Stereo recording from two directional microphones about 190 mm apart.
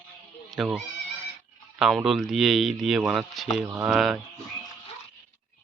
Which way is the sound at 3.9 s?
Centre (ahead or behind).